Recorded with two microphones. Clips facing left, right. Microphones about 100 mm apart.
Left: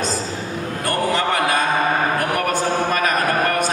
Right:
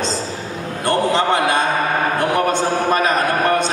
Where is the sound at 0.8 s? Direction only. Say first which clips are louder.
Right 4 dB; 25° right (ahead or behind).